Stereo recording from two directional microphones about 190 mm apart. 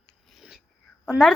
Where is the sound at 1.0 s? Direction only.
5° right (ahead or behind).